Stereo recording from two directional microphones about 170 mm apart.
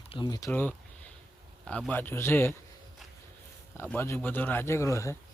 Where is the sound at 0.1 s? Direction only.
25° left (ahead or behind).